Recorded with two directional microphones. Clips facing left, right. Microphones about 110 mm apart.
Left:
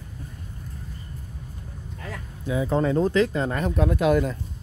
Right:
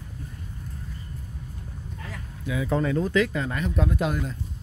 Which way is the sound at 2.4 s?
30° left (ahead or behind).